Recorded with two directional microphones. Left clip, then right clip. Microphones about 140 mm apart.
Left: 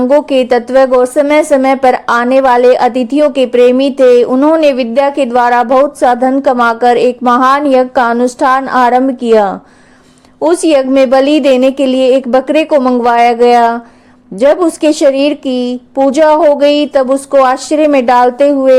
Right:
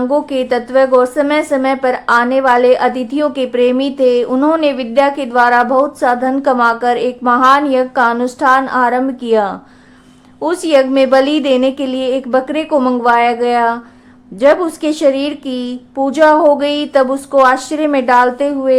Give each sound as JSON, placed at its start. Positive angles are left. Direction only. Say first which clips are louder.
{"t": 0.3, "sound": "speech", "louder": "left 6 dB", "side_deg": 50}
{"t": 4.3, "sound": "a woman's voice", "louder": "left 4 dB", "side_deg": 30}
{"t": 4.6, "sound": "speech", "louder": "left 3 dB", "side_deg": 40}